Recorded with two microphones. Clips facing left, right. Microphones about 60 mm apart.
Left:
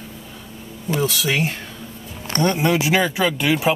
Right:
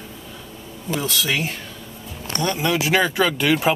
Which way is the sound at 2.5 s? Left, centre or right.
Left.